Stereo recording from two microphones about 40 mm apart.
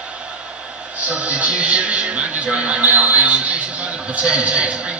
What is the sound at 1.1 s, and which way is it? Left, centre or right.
Speech, right.